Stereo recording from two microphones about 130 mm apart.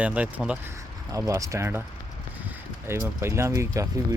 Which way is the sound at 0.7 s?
25° right (ahead or behind).